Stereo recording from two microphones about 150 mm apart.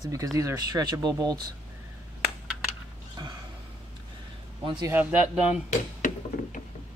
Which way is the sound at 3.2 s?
30° right (ahead or behind).